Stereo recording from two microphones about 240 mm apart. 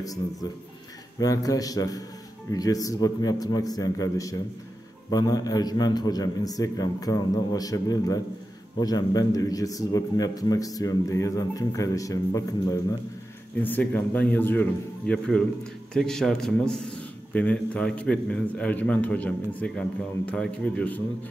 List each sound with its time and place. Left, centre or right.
0.0 s a man's voice: centre